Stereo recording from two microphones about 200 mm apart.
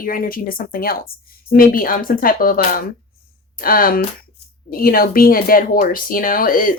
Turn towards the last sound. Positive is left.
turn(degrees=45)  # may be behind; listen again after turning